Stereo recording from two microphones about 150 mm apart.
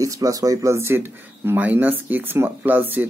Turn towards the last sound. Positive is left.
turn(degrees=-10)  # may be behind; listen again after turning